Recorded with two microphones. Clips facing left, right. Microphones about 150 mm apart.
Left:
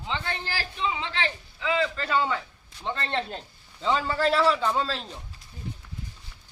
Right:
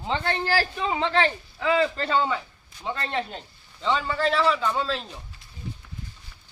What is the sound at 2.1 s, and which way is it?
Speech, 20° right (ahead or behind).